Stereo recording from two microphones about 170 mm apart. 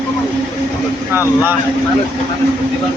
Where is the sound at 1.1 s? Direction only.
15° right (ahead or behind).